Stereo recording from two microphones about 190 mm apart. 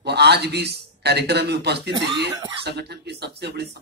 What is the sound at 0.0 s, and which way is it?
Speech, 60° right (ahead or behind).